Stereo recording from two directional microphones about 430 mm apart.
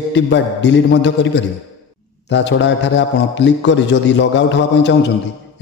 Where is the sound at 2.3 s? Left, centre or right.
Left.